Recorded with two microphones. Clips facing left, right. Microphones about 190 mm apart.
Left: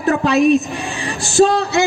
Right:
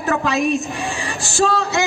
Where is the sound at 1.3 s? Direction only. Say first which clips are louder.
Left 5 dB; 35° left (ahead or behind).